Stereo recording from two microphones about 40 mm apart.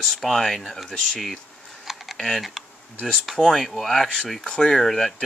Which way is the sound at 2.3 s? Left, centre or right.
Centre.